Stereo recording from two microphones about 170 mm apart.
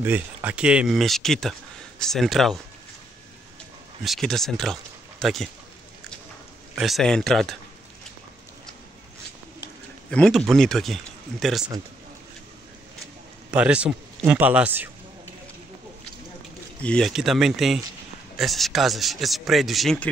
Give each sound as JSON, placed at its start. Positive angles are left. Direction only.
{"t": 0.0, "sound": "speech", "side_deg": -10}
{"t": 4.0, "sound": "speech", "side_deg": 0}
{"t": 6.8, "sound": "speech", "side_deg": 0}
{"t": 10.1, "sound": "speech", "side_deg": 5}
{"t": 13.5, "sound": "speech", "side_deg": -5}
{"t": 16.8, "sound": "speech", "side_deg": 5}